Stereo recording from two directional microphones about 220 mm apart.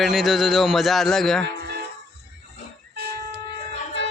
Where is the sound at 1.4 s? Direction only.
50° right (ahead or behind).